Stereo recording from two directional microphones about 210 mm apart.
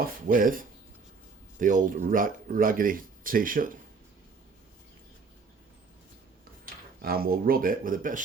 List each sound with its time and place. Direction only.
0.3 s speech: 40° right (ahead or behind)
7.0 s speech: 45° right (ahead or behind)